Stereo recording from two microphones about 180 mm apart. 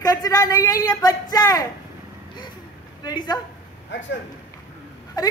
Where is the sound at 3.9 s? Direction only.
90° left.